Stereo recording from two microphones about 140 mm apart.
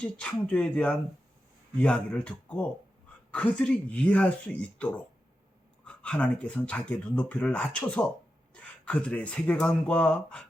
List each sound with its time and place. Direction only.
0.0 s speech: 10° left (ahead or behind)